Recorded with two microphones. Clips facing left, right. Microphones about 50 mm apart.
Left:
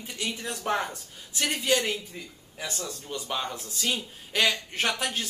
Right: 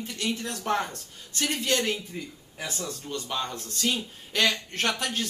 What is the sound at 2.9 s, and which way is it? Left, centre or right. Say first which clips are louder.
Speech: even; centre.